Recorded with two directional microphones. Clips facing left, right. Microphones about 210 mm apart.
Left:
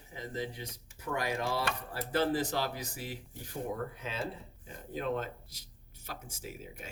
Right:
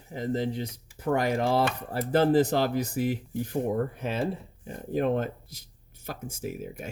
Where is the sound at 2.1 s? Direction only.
55° right (ahead or behind).